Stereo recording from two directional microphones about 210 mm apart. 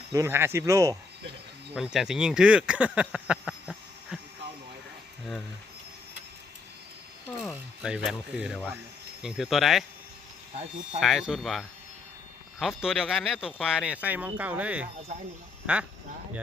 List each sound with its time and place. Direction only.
0.1 s speech: 15° right (ahead or behind)
1.7 s speech: 5° right (ahead or behind)
7.5 s speech: 5° right (ahead or behind)
10.5 s speech: 30° right (ahead or behind)
11.0 s speech: centre (ahead or behind)
14.9 s speech: 30° right (ahead or behind)
15.6 s speech: 5° right (ahead or behind)